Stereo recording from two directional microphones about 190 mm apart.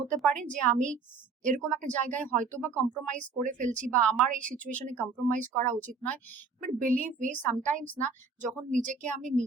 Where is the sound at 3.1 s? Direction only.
40° right (ahead or behind).